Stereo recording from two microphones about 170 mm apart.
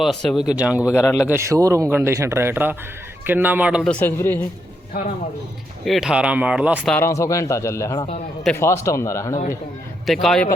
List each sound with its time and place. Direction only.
0.0 s a man's voice: centre (ahead or behind)
0.9 s a man's voice: 20° left (ahead or behind)
1.3 s a man's voice: 15° right (ahead or behind)
3.8 s a man's voice: 10° left (ahead or behind)
5.8 s a man's voice: centre (ahead or behind)
6.9 s a man's voice: 15° left (ahead or behind)
10.1 s speech: centre (ahead or behind)